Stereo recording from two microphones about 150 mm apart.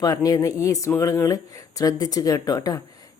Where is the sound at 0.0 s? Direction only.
25° left (ahead or behind).